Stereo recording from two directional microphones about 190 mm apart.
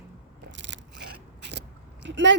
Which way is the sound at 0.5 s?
70° right (ahead or behind).